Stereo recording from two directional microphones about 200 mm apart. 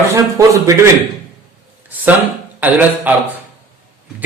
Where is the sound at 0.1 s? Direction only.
15° right (ahead or behind).